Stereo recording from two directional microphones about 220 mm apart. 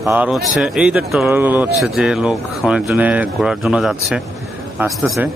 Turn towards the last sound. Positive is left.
turn(degrees=-5)  # may be behind; listen again after turning